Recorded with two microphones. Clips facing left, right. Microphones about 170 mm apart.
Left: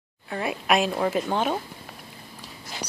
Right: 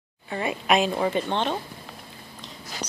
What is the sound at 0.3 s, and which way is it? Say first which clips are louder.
Speech: right 1 dB; centre (ahead or behind).